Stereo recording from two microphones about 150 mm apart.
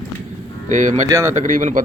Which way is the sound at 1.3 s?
60° right (ahead or behind).